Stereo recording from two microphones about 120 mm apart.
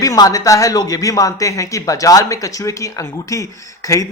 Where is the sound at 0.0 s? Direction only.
30° left (ahead or behind).